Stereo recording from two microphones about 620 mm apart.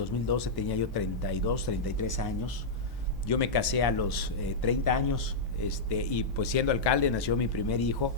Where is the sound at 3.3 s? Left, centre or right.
Left.